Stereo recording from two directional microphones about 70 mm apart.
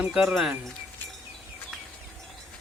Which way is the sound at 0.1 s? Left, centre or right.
Centre.